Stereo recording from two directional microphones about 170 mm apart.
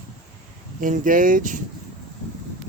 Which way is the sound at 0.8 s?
50° right (ahead or behind).